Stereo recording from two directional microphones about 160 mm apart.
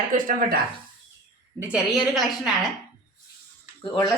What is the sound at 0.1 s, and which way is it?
Speech, 60° right (ahead or behind).